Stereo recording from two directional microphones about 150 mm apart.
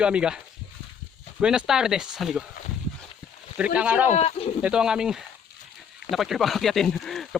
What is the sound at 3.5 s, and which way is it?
Speech, 10° right (ahead or behind).